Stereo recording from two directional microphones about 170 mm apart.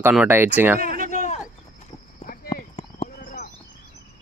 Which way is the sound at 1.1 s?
45° left (ahead or behind).